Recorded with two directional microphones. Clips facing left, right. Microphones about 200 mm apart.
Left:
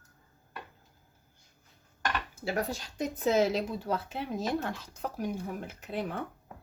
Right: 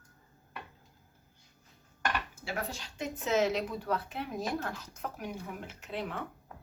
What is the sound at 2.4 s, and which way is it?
Speech, 40° left (ahead or behind).